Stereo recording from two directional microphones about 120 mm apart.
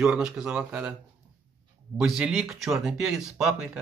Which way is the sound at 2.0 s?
5° right (ahead or behind).